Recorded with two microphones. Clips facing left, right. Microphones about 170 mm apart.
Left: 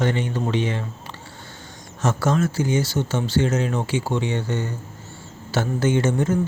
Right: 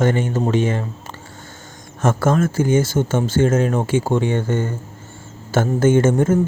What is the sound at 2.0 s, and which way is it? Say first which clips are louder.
Speech: right 4 dB; 50° right (ahead or behind).